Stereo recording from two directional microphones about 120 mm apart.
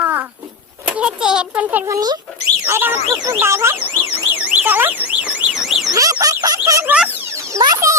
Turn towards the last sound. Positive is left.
turn(degrees=-25)  # may be behind; listen again after turning